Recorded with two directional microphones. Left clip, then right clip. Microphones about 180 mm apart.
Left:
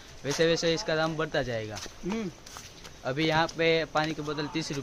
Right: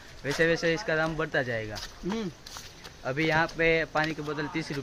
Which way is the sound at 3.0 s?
10° left (ahead or behind).